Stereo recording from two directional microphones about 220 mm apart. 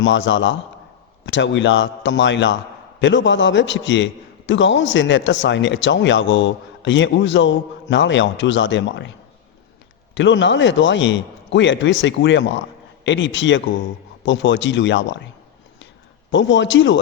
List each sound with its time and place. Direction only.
0.0 s a man's voice: 55° left (ahead or behind)
10.2 s a man's voice: 55° left (ahead or behind)
16.3 s a man's voice: 55° left (ahead or behind)